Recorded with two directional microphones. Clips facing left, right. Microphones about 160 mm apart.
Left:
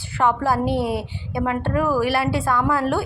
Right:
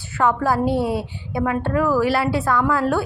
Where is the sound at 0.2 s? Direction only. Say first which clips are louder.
Right 1 dB; 25° left (ahead or behind).